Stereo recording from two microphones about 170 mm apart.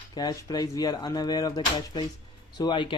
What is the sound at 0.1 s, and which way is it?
Speech, 25° left (ahead or behind).